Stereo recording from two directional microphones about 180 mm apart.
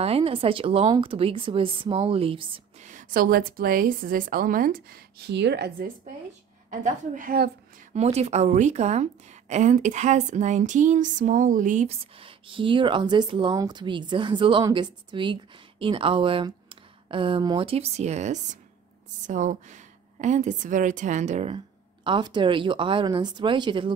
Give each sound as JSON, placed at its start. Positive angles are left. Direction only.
{"t": 0.0, "sound": "speech", "side_deg": -30}
{"t": 2.9, "sound": "a woman's voice", "side_deg": -50}
{"t": 6.7, "sound": "a woman's voice", "side_deg": -50}
{"t": 7.9, "sound": "a woman's voice", "side_deg": -35}
{"t": 22.0, "sound": "speech", "side_deg": -25}